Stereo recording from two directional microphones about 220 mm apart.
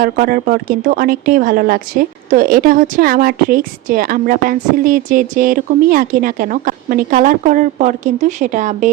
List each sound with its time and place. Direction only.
0.0 s a woman's voice: 40° right (ahead or behind)